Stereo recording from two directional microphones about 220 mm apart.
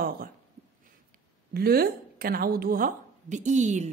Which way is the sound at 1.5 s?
45° right (ahead or behind).